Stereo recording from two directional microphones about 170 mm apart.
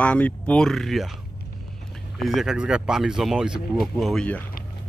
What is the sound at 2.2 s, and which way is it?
Speech, centre (ahead or behind).